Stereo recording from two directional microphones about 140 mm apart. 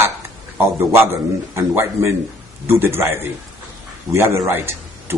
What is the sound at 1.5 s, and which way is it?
A man's voice, 20° right (ahead or behind).